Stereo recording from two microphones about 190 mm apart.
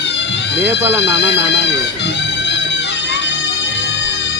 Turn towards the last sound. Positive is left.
turn(degrees=65)  # may be behind; listen again after turning